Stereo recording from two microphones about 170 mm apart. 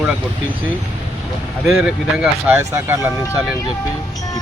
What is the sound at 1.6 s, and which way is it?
Speech, 5° right (ahead or behind).